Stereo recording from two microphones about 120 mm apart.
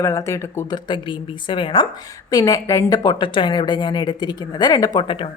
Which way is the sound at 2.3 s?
30° left (ahead or behind).